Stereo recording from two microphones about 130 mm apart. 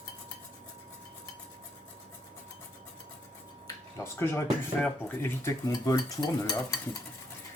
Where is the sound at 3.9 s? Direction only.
20° left (ahead or behind).